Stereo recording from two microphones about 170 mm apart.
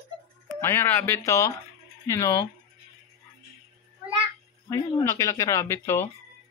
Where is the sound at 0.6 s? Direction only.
10° left (ahead or behind).